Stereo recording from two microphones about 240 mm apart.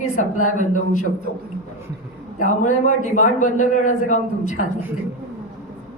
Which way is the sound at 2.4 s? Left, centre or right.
Left.